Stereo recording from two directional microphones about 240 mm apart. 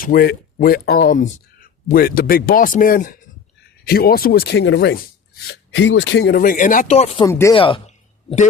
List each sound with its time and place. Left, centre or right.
0.0 s speech: left
7.3 s speech: centre